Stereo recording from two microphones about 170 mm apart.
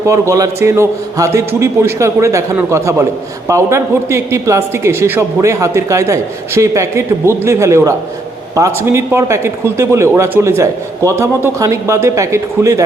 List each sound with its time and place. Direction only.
0.0 s a man's voice: 20° right (ahead or behind)